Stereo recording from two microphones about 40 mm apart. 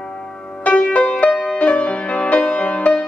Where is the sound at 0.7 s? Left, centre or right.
Left.